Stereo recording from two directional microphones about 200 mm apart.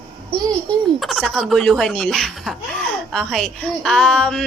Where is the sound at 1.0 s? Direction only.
Centre (ahead or behind).